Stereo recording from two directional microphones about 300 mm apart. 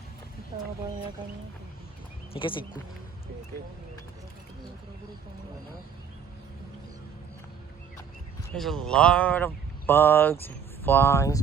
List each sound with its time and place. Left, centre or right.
2.3 s speech: centre
8.5 s speech: centre